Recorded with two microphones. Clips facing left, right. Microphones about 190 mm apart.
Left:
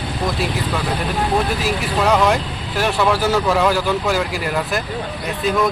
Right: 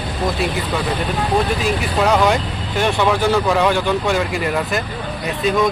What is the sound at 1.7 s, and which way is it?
Speech, centre (ahead or behind).